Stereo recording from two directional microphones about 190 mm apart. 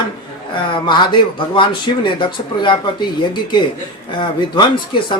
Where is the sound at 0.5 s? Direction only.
25° left (ahead or behind).